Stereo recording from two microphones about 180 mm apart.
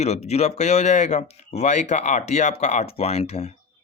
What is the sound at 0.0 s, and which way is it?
Speech, 35° left (ahead or behind).